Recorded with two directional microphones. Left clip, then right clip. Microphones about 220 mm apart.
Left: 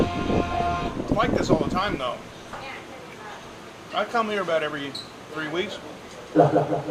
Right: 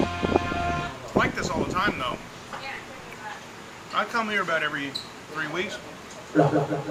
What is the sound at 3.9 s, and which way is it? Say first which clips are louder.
Speech: left 1 dB; centre (ahead or behind).